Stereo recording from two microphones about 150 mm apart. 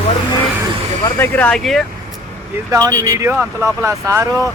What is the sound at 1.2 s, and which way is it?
Speech, 10° left (ahead or behind).